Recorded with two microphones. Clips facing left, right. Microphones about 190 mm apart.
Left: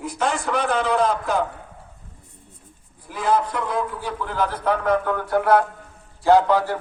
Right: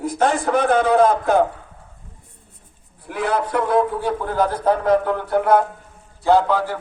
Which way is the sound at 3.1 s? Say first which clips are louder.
Even; 60° right (ahead or behind).